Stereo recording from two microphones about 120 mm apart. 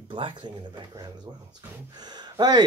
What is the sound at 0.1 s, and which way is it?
Speech, 40° right (ahead or behind).